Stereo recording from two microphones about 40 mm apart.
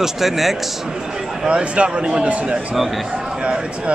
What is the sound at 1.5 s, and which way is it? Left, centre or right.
A man's voice, right.